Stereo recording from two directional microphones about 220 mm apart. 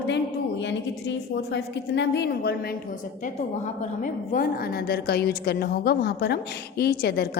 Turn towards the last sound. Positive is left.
turn(degrees=45)  # may be behind; listen again after turning